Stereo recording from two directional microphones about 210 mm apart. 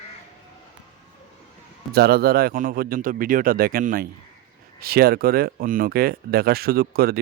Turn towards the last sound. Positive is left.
turn(degrees=-45)  # may be behind; listen again after turning